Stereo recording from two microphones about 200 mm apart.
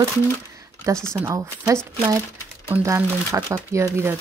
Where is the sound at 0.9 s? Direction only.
15° right (ahead or behind).